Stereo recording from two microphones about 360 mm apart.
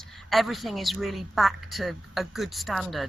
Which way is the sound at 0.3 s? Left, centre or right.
Centre.